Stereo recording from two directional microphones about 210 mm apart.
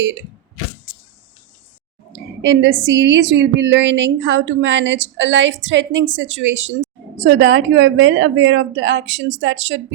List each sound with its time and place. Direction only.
2.4 s a woman's voice: 60° right (ahead or behind)